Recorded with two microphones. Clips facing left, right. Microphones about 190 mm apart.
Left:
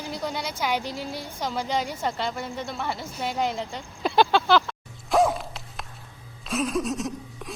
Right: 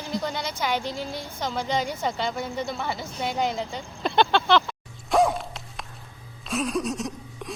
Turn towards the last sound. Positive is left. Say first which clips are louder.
# left 1 dB
turn(degrees=0)  # may be behind; listen again after turning